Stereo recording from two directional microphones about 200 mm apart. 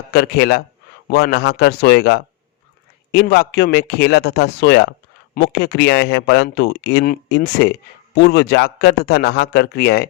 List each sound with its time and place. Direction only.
0.1 s speech: 50° left (ahead or behind)